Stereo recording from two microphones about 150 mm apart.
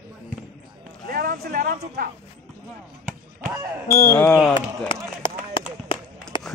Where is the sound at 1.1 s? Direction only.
75° right (ahead or behind).